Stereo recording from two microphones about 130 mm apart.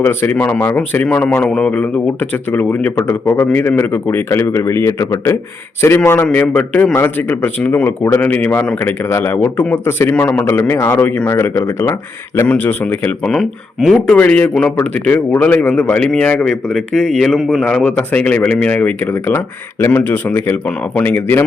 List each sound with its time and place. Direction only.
0.0 s a man's voice: 15° left (ahead or behind); by 14.2 s centre (ahead or behind)
14.2 s a man's voice: 10° left (ahead or behind)